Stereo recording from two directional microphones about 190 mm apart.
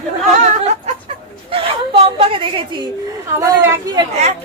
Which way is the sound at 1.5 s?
30° right (ahead or behind).